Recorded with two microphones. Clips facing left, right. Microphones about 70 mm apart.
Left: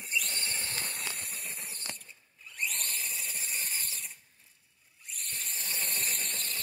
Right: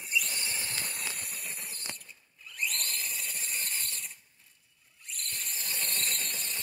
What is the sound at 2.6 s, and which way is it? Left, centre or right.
Squeal, centre.